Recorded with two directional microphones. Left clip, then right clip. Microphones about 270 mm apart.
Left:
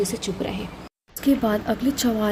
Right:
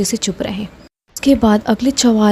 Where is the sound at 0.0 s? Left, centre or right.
Right.